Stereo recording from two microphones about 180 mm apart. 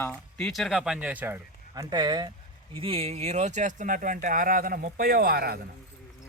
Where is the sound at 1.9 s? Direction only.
25° right (ahead or behind); by 5.6 s 60° right (ahead or behind).